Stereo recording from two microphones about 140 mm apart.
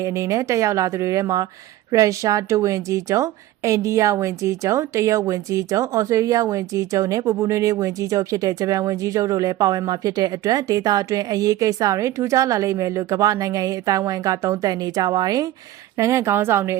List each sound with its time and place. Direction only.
0.0 s a woman's voice: 20° right (ahead or behind)